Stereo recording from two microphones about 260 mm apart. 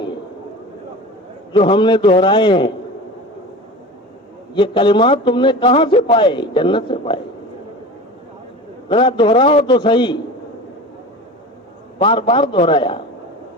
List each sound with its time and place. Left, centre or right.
1.5 s a man's voice: centre
4.5 s a man's voice: centre
8.9 s a man's voice: centre
11.9 s a man's voice: centre